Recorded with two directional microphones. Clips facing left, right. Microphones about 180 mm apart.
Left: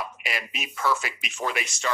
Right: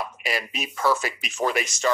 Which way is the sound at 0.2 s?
35° right (ahead or behind).